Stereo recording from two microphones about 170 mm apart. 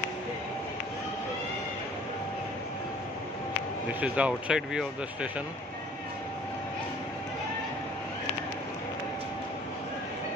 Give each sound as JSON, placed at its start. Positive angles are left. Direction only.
{"t": 4.0, "sound": "speech", "side_deg": -5}